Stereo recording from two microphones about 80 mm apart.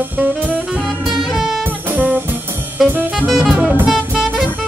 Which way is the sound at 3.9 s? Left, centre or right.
Centre.